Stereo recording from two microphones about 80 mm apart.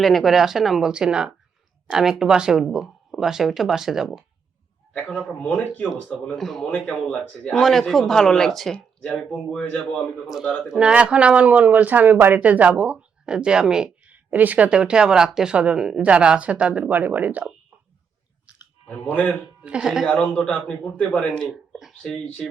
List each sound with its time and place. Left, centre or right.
0.0 s speech: centre
4.9 s a man's voice: centre
6.1 s speech: centre
6.8 s a man's voice: centre
7.6 s a man's voice: centre
10.7 s speech: centre
19.1 s speech: centre
19.6 s speech: centre
20.1 s a man's voice: centre
21.8 s a sound: centre